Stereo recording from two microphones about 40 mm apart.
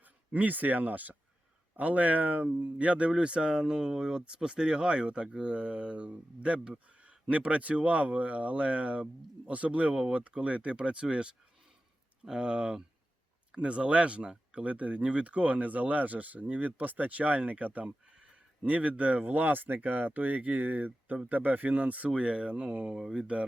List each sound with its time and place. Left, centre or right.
0.3 s speech: right
17.8 s a sound: right
18.6 s speech: right
22.1 s speech: right